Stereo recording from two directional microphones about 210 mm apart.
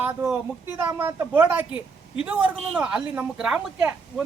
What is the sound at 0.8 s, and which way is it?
A woman's voice, 10° right (ahead or behind).